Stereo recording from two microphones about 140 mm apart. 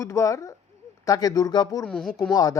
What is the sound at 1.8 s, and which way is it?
Speech, 5° left (ahead or behind).